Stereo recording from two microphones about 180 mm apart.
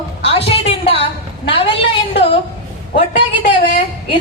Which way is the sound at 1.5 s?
30° left (ahead or behind).